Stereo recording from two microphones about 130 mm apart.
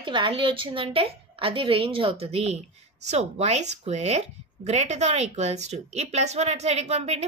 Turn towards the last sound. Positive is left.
turn(degrees=-55)  # may be behind; listen again after turning